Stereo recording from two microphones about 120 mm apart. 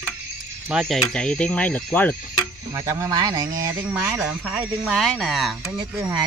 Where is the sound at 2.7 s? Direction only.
25° right (ahead or behind).